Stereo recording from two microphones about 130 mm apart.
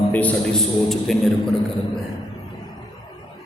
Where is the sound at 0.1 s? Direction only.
10° left (ahead or behind).